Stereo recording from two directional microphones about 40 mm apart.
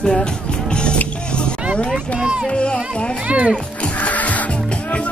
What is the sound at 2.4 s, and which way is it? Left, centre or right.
Speech, left.